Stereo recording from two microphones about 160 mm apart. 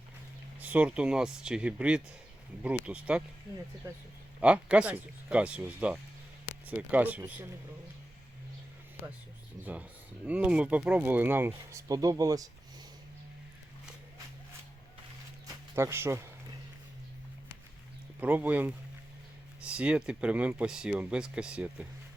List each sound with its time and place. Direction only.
0.6 s speech: 10° right (ahead or behind)
4.4 s speech: 5° right (ahead or behind)
10.2 s speech: 10° right (ahead or behind)
15.7 s speech: 15° right (ahead or behind)
18.2 s speech: 10° right (ahead or behind)